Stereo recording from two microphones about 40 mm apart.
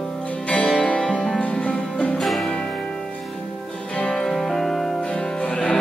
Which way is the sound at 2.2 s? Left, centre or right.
Centre.